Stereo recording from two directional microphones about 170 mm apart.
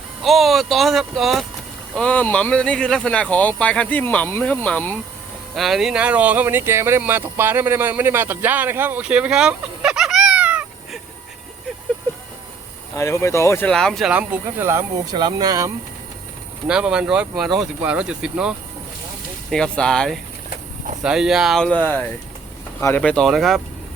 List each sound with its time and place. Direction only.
0.2 s speech: centre (ahead or behind)
5.5 s speech: centre (ahead or behind)
13.0 s speech: 15° left (ahead or behind)
13.7 s speech: 5° left (ahead or behind)
14.1 s speech: 10° right (ahead or behind)
15.1 s speech: 25° right (ahead or behind)
16.6 s speech: 5° right (ahead or behind)